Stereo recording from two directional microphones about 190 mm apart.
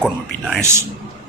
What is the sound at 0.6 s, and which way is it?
Speech, 15° right (ahead or behind).